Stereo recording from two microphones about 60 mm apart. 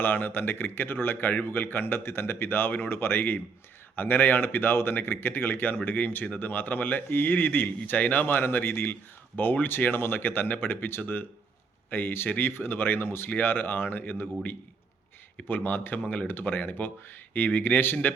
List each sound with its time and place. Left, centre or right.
0.0 s speech: left
15.4 s speech: left